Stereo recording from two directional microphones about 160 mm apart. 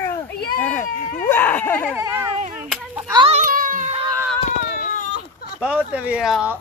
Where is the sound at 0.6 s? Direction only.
10° left (ahead or behind).